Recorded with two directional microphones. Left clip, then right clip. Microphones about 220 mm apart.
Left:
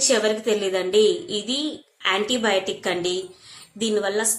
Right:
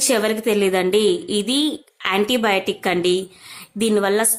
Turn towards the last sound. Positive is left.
turn(degrees=-40)  # may be behind; listen again after turning